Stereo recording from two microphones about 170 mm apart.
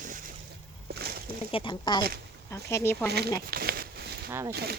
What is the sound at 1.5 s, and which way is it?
Speech, 30° left (ahead or behind).